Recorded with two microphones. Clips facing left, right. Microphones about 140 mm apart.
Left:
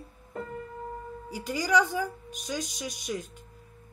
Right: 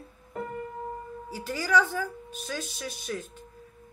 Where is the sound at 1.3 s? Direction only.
15° left (ahead or behind).